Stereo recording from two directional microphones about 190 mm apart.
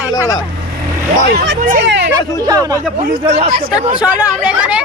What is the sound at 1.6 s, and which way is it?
Speech, 45° right (ahead or behind).